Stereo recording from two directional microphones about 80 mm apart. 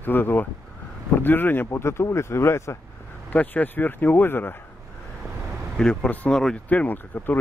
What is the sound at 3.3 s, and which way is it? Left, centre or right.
Speech, centre.